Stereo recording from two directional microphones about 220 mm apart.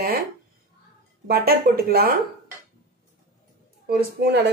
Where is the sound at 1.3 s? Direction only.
45° right (ahead or behind).